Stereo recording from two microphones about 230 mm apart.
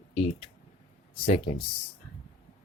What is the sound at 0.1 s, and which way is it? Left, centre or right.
Speech, left.